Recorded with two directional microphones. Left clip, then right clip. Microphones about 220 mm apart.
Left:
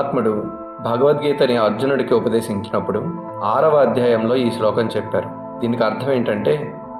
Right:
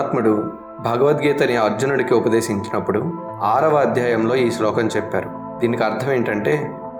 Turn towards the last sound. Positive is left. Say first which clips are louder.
# left 1 dB
turn(degrees=-30)  # may be behind; listen again after turning